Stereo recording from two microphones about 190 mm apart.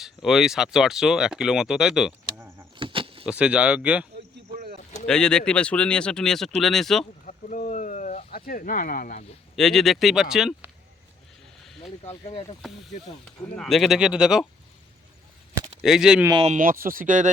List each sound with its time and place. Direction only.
0.0 s speech: centre (ahead or behind)
2.7 s a sound: 25° right (ahead or behind)
3.2 s speech: 5° right (ahead or behind)
4.5 s a sound: 40° right (ahead or behind)
5.0 s speech: 5° left (ahead or behind)
7.3 s a sound: 45° left (ahead or behind)
9.6 s speech: centre (ahead or behind)
12.0 s speech: 30° left (ahead or behind)
13.6 s speech: centre (ahead or behind)
15.8 s speech: 5° right (ahead or behind)
16.4 s speech: 40° right (ahead or behind)